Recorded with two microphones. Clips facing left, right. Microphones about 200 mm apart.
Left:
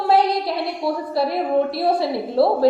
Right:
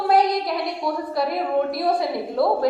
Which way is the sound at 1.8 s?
30° left (ahead or behind).